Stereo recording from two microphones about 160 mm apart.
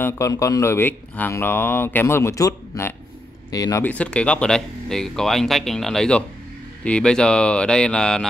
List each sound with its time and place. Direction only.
0.0 s speech: 20° left (ahead or behind)
3.8 s speech: 10° left (ahead or behind)